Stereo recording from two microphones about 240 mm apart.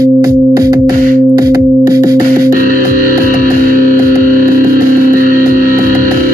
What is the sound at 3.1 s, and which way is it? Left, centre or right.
Music, right.